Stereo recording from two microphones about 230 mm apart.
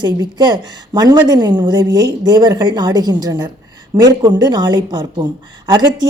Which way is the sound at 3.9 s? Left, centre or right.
Centre.